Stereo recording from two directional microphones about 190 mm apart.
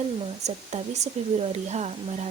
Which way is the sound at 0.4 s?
35° right (ahead or behind).